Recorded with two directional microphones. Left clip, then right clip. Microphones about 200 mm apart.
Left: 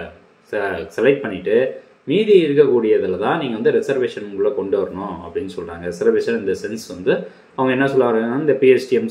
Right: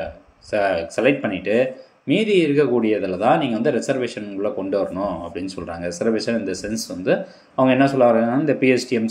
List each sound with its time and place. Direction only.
0.5 s speech: 35° right (ahead or behind)